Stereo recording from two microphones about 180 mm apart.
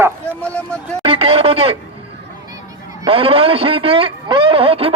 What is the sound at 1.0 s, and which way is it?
Speech, 35° right (ahead or behind).